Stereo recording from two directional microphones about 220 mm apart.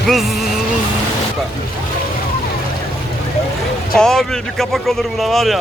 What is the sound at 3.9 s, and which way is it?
Speech, centre (ahead or behind).